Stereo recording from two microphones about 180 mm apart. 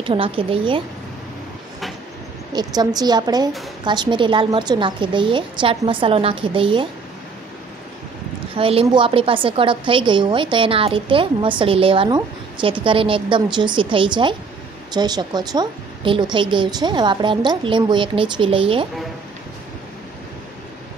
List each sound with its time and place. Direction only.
0.0 s a woman's voice: 30° right (ahead or behind)
2.5 s a woman's voice: 20° right (ahead or behind)
8.5 s a woman's voice: 30° right (ahead or behind)